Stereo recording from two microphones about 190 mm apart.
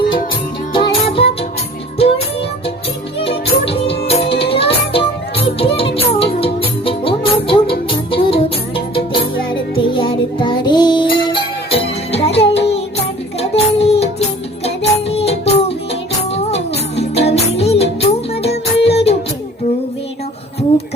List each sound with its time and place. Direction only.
0.7 s music: 30° left (ahead or behind)